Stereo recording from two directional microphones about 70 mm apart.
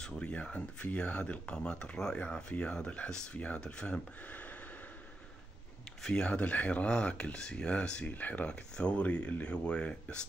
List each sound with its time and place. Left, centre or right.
0.0 s speech: centre
6.0 s speech: centre